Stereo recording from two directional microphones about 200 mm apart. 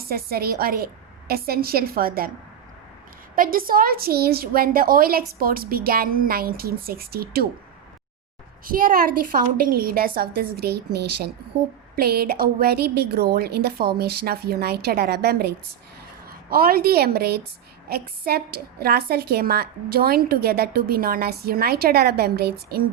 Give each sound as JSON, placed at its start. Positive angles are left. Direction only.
{"t": 0.0, "sound": "a woman's voice", "side_deg": -50}
{"t": 3.3, "sound": "a woman's voice", "side_deg": -45}
{"t": 8.6, "sound": "a woman's voice", "side_deg": -45}